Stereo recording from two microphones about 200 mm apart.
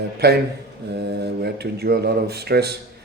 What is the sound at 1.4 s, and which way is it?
Speech, 55° right (ahead or behind).